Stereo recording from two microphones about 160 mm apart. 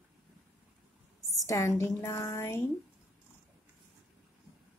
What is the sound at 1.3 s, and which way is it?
A woman's voice, 20° left (ahead or behind).